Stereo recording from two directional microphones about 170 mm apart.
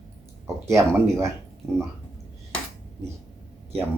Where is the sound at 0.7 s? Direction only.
15° right (ahead or behind).